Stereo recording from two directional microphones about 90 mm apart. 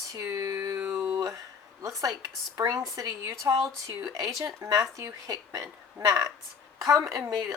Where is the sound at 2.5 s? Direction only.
35° right (ahead or behind).